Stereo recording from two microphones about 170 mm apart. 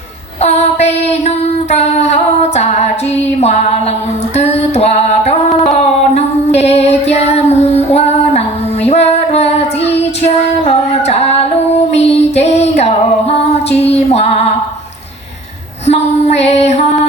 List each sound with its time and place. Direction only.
0.4 s child singing: 40° left (ahead or behind)
1.7 s female singing: 40° left (ahead or behind)
3.4 s music: 40° left (ahead or behind)
10.2 s female singing: 40° left (ahead or behind)
15.9 s music: 40° left (ahead or behind)